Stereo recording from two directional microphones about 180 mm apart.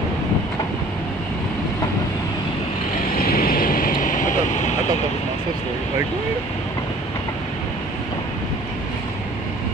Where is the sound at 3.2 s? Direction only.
55° left (ahead or behind).